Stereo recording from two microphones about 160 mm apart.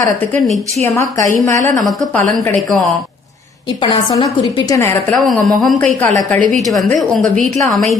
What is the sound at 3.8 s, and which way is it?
A woman's voice, 35° left (ahead or behind).